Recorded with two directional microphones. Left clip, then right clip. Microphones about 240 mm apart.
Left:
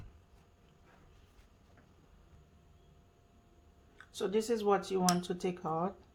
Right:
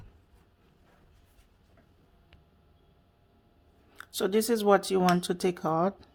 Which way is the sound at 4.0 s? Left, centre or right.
Right.